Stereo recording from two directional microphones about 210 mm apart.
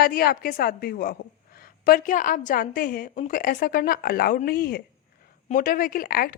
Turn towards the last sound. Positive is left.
turn(degrees=45)  # may be behind; listen again after turning